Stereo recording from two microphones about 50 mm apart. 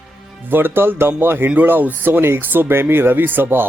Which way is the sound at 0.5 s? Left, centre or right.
Right.